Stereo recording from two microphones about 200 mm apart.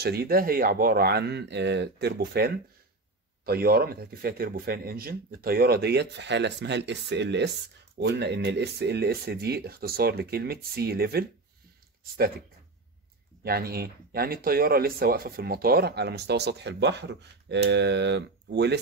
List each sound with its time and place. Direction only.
0.0 s speech: 50° right (ahead or behind)